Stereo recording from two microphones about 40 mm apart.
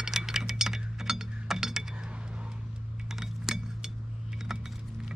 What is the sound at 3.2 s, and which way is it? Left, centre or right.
Chink, centre.